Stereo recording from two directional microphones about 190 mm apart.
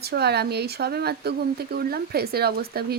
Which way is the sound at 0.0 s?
60° right (ahead or behind).